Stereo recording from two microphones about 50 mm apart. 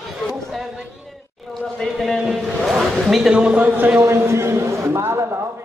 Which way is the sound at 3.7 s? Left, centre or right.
Right.